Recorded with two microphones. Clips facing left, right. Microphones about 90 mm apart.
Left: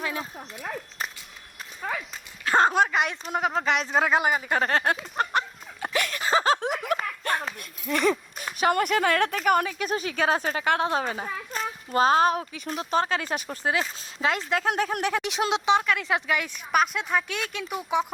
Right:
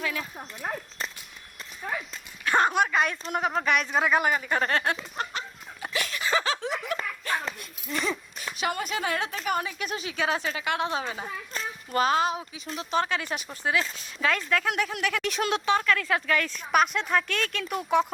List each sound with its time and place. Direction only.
0.0 s speech: 30° left (ahead or behind)
2.4 s a sound: 30° left (ahead or behind)
3.3 s speech: 30° left (ahead or behind)
4.4 s a sound: 35° left (ahead or behind)
6.6 s laughter: 50° left (ahead or behind)
8.1 s a sound: 45° left (ahead or behind)
8.8 s speech: 55° left (ahead or behind)
9.7 s speech: 40° left (ahead or behind)
15.2 s speech: 20° left (ahead or behind)
16.7 s speech: centre (ahead or behind)